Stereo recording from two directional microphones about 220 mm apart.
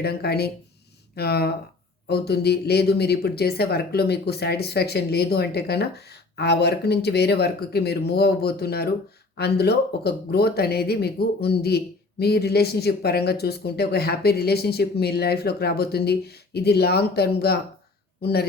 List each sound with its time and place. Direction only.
0.0 s speech: 45° left (ahead or behind)